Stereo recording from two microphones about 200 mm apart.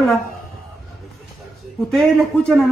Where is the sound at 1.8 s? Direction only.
Centre (ahead or behind).